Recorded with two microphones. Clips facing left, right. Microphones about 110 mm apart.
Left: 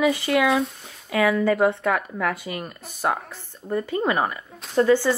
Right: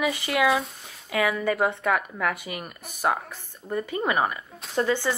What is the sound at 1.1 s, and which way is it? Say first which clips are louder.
Speech: left 4 dB; 20° right (ahead or behind).